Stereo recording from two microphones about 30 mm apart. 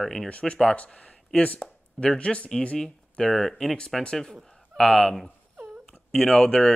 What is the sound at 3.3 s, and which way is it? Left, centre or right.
Speech, centre.